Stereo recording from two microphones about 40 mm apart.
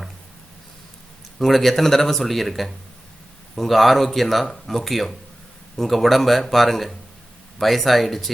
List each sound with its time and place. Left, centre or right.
1.4 s speech: centre